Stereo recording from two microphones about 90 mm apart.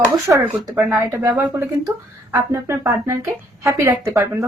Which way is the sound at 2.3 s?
25° right (ahead or behind).